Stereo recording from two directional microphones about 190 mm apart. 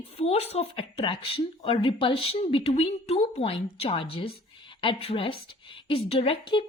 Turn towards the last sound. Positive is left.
turn(degrees=30)  # may be behind; listen again after turning